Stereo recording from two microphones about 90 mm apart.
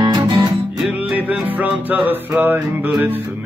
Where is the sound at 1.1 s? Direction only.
15° right (ahead or behind).